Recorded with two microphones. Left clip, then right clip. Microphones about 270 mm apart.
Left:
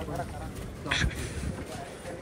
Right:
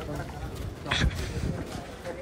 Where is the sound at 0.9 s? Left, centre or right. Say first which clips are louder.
Right 1 dB; centre.